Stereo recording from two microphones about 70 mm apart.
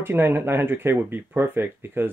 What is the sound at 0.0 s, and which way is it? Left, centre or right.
Speech, right.